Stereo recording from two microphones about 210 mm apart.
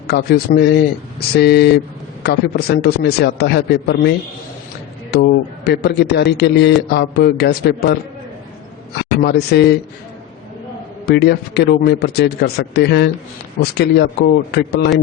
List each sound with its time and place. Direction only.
0.1 s a man's voice: 50° left (ahead or behind)
5.1 s a man's voice: 50° left (ahead or behind)
9.0 s a man's voice: 50° left (ahead or behind)
11.0 s a man's voice: 50° left (ahead or behind)